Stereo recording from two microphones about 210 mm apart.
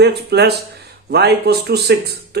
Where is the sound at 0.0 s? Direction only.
50° right (ahead or behind).